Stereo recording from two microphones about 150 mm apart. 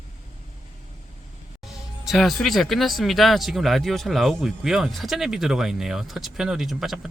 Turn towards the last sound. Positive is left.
turn(degrees=0)  # may be behind; listen again after turning